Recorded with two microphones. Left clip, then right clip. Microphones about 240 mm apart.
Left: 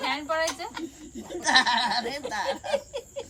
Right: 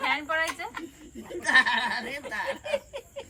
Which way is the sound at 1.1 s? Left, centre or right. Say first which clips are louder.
Even; left.